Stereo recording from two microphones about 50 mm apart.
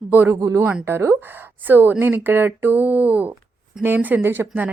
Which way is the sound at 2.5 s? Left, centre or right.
Right.